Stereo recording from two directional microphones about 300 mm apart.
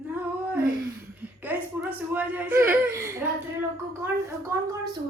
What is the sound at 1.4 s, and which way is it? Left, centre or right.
Speech, centre.